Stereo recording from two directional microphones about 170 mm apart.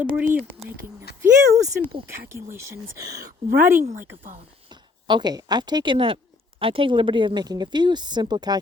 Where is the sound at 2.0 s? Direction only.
15° right (ahead or behind).